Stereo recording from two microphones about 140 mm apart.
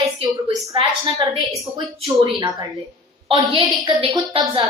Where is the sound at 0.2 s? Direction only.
40° right (ahead or behind).